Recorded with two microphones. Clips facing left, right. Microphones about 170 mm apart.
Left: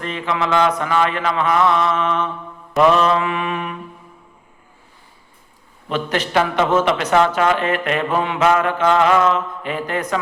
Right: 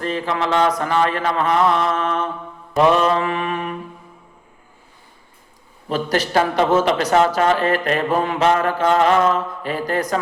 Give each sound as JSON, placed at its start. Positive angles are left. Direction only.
{"t": 0.0, "sound": "speech", "side_deg": -35}
{"t": 2.8, "sound": "speech", "side_deg": -30}
{"t": 5.9, "sound": "speech", "side_deg": -40}